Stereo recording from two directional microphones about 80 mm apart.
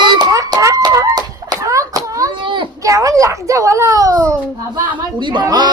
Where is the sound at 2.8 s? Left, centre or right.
Right.